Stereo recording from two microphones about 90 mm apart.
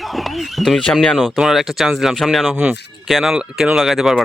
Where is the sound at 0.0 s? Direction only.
Centre (ahead or behind).